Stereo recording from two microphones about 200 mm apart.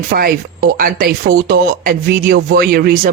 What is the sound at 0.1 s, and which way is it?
Speech, 50° right (ahead or behind).